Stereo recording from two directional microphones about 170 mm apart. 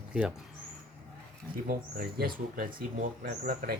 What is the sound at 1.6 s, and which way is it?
Speech, 65° right (ahead or behind).